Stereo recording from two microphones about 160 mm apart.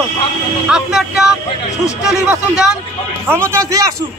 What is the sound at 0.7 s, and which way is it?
Speech, 5° right (ahead or behind).